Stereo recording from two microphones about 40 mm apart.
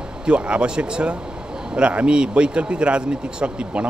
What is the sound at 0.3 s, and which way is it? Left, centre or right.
Speech, right.